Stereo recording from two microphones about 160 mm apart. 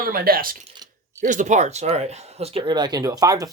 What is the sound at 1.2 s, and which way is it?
Speech, 55° right (ahead or behind).